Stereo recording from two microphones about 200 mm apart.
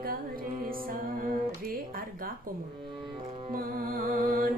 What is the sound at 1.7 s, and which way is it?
Music, 45° right (ahead or behind).